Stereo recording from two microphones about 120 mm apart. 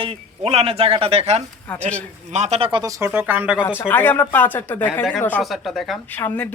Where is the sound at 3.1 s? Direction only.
15° right (ahead or behind).